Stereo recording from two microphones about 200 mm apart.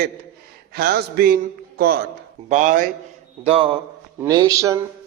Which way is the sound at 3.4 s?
30° right (ahead or behind).